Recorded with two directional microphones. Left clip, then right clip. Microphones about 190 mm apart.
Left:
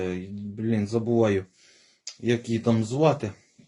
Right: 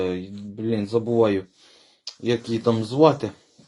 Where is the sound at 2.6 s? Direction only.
15° left (ahead or behind).